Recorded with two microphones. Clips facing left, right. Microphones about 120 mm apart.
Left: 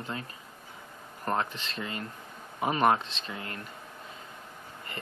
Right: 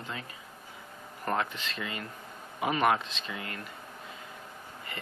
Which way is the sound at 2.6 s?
35° left (ahead or behind).